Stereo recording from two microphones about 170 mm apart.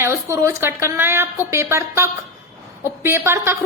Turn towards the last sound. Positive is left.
turn(degrees=-15)  # may be behind; listen again after turning